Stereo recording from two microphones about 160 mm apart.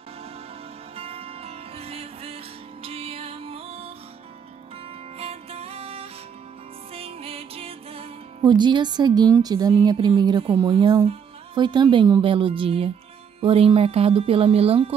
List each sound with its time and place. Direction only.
0.9 s music: 40° right (ahead or behind)
5.2 s music: 40° right (ahead or behind)
11.1 s speech: 30° right (ahead or behind)